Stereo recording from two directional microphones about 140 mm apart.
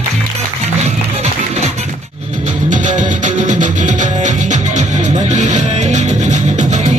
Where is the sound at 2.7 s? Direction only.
60° right (ahead or behind).